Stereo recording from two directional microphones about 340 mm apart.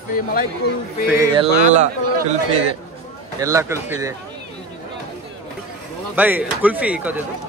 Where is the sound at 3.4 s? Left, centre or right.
Centre.